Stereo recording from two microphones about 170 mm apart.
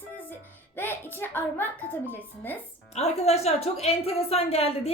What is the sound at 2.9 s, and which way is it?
A woman's voice, 40° left (ahead or behind).